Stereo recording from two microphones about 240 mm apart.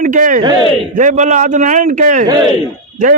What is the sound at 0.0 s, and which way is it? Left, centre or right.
A man's voice, right.